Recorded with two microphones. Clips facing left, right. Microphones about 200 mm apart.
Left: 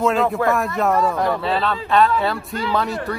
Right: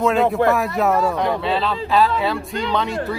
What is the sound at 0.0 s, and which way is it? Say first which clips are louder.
Speech: right 2 dB; centre (ahead or behind).